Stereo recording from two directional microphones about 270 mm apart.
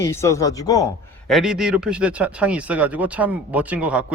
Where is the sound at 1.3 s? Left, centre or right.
Centre.